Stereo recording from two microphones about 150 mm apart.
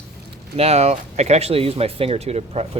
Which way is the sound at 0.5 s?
45° right (ahead or behind).